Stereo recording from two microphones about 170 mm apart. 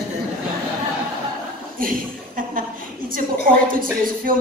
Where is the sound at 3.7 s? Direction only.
55° right (ahead or behind).